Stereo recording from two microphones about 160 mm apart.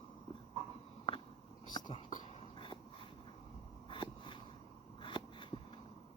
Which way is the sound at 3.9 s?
30° left (ahead or behind).